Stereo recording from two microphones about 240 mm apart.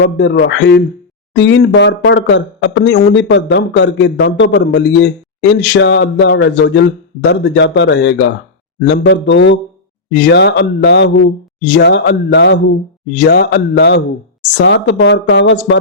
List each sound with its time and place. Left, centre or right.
0.0 s speech: left